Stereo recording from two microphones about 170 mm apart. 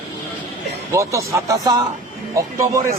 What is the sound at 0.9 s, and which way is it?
A man's voice, 15° right (ahead or behind).